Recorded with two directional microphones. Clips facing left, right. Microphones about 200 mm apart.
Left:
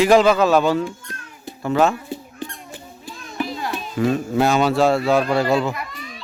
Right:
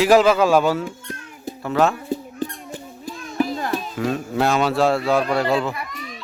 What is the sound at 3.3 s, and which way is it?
Music, 45° right (ahead or behind).